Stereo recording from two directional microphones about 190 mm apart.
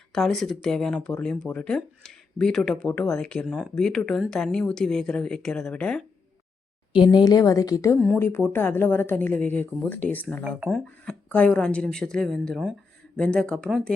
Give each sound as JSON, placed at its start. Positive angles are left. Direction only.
{"t": 0.1, "sound": "speech", "side_deg": 0}
{"t": 7.1, "sound": "a woman's voice", "side_deg": 20}